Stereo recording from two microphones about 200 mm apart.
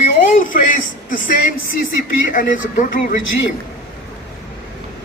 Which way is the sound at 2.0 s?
40° left (ahead or behind).